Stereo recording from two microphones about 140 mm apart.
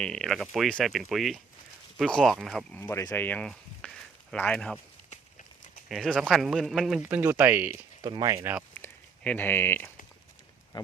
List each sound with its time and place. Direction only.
0.0 s speech: 5° left (ahead or behind)
5.1 s horse: 65° left (ahead or behind)
5.9 s speech: centre (ahead or behind)
7.1 s speech: 15° right (ahead or behind)
8.0 s speech: 30° right (ahead or behind)
8.7 s a sound: 10° left (ahead or behind)